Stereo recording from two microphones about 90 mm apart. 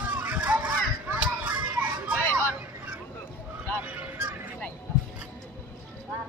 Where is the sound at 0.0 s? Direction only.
15° right (ahead or behind).